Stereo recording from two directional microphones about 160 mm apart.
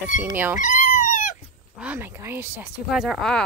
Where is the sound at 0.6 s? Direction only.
55° left (ahead or behind).